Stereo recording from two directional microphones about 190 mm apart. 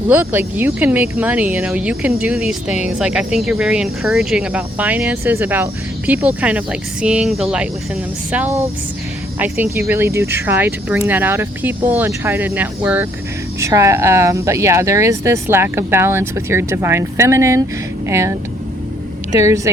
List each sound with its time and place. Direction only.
0.1 s speech: 10° right (ahead or behind)